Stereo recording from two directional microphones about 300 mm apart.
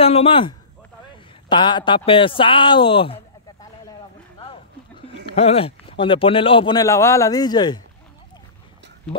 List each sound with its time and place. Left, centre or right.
0.0 s a man's voice: centre
5.0 s speech: centre